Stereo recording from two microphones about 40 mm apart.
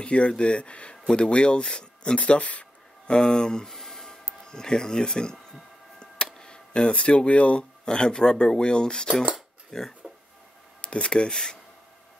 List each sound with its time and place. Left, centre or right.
0.0 s speech: left
3.1 s speech: centre
7.8 s speech: centre
9.7 s speech: centre
10.8 s speech: left